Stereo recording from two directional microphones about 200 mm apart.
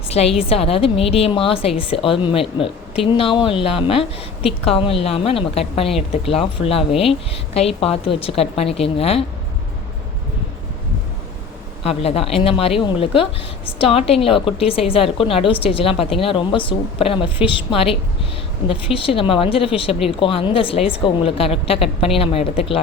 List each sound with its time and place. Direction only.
0.1 s a woman's voice: 30° left (ahead or behind)
11.8 s a woman's voice: 30° left (ahead or behind)
18.9 s a woman's voice: 25° left (ahead or behind)